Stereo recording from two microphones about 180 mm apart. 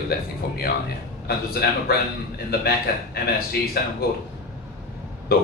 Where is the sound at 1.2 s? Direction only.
60° left (ahead or behind).